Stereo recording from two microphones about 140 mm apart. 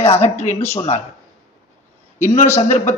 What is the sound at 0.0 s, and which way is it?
Speech, 50° left (ahead or behind).